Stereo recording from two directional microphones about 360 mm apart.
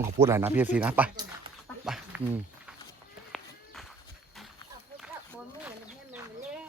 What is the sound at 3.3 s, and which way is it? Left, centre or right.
Run, centre.